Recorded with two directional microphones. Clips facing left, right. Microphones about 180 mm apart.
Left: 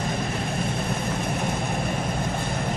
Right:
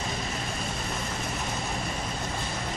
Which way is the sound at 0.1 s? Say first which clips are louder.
Left 6 dB; 55° left (ahead or behind).